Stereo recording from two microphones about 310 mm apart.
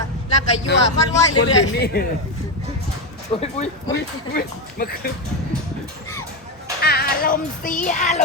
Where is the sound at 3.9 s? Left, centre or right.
Left.